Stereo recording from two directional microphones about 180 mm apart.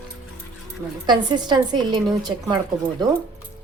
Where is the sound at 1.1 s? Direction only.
25° right (ahead or behind).